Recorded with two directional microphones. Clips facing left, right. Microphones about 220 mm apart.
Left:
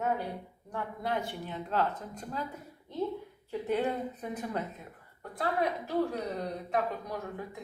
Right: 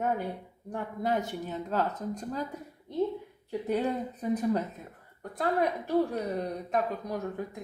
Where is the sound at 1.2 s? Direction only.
40° right (ahead or behind).